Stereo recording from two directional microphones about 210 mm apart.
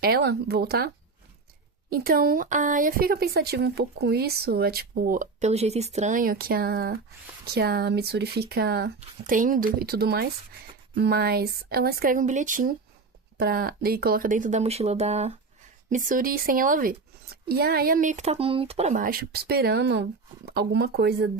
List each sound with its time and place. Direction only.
0.0 s speech: 50° right (ahead or behind)
1.9 s speech: 45° right (ahead or behind)
9.0 s speech: 40° right (ahead or behind)